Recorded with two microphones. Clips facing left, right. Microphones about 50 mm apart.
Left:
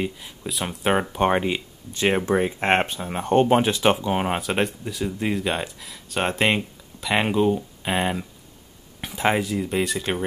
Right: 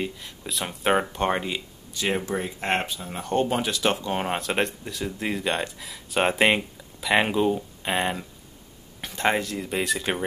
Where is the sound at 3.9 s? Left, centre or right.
Centre.